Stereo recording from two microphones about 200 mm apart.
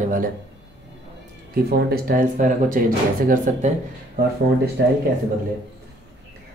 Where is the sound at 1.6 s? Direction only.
50° right (ahead or behind).